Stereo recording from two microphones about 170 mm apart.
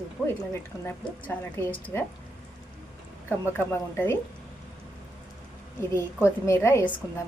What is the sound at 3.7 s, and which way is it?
Speech, 15° left (ahead or behind).